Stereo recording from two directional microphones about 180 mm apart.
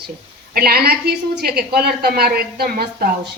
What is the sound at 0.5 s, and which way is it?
A woman's voice, 60° right (ahead or behind).